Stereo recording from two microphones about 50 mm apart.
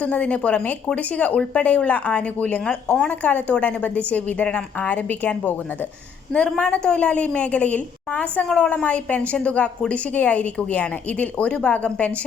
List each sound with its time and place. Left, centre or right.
0.0 s a woman's voice: left
3.1 s a woman's voice: left
6.3 s a woman's voice: left
8.4 s speech: centre
8.7 s a woman's voice: left